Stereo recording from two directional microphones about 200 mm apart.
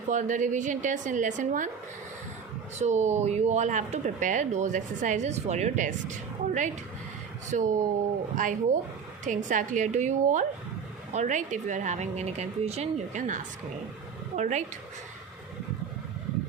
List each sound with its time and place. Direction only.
0.1 s speech: 40° right (ahead or behind)
2.7 s speech: 35° right (ahead or behind)